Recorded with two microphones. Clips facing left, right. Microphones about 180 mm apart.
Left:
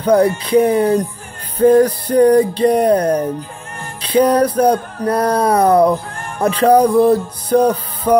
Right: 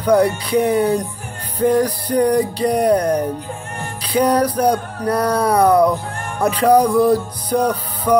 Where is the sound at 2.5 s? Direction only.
25° left (ahead or behind).